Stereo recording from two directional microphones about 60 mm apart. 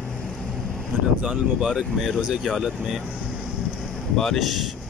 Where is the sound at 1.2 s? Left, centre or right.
Right.